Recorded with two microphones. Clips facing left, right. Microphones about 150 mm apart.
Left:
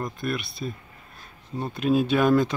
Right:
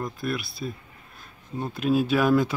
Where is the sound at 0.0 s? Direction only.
Centre (ahead or behind).